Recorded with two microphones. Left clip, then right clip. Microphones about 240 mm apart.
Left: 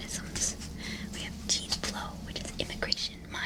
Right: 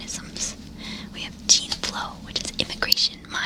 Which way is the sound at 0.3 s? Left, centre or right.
Centre.